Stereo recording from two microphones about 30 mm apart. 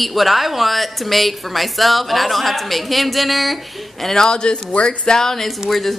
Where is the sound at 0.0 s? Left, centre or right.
Centre.